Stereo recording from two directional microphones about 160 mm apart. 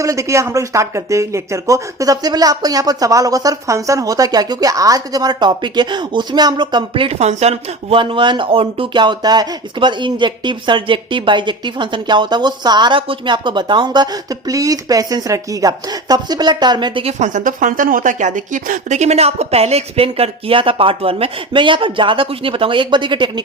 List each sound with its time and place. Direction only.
0.0 s speech: 20° right (ahead or behind)